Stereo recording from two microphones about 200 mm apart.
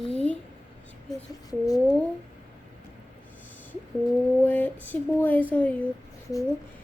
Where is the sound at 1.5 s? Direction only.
20° left (ahead or behind).